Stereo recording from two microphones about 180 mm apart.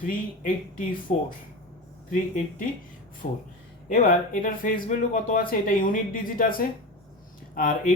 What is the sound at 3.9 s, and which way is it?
Speech, 50° left (ahead or behind).